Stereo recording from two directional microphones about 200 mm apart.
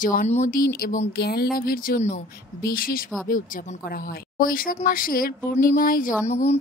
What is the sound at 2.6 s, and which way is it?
Speech, 45° left (ahead or behind).